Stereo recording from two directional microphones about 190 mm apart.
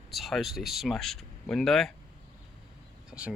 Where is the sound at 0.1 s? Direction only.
Centre (ahead or behind).